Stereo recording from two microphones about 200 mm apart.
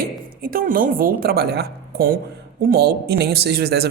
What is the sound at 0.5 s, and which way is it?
Speech, 45° right (ahead or behind).